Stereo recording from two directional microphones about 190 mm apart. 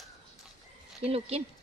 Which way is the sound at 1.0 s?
30° right (ahead or behind).